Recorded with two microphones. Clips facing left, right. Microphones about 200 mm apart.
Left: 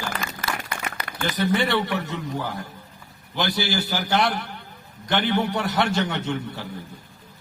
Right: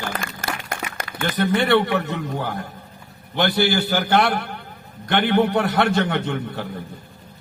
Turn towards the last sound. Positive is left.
turn(degrees=-55)  # may be behind; listen again after turning